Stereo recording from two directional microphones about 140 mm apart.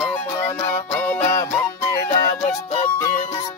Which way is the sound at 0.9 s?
15° left (ahead or behind).